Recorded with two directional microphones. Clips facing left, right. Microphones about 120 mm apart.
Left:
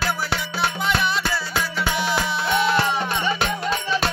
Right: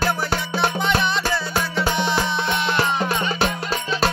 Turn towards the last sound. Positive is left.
turn(degrees=-35)  # may be behind; listen again after turning